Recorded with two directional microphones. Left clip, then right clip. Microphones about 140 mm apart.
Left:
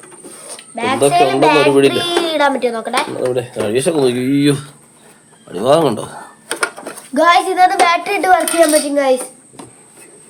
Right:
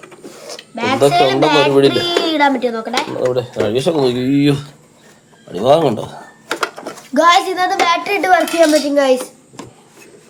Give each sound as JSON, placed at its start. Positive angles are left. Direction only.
{"t": 0.8, "sound": "a child's voice", "side_deg": 0}
{"t": 1.1, "sound": "speech", "side_deg": 10}
{"t": 1.9, "sound": "a child's voice", "side_deg": 25}
{"t": 3.2, "sound": "speech", "side_deg": 5}
{"t": 7.1, "sound": "a child's voice", "side_deg": -25}
{"t": 9.0, "sound": "a sound", "side_deg": -30}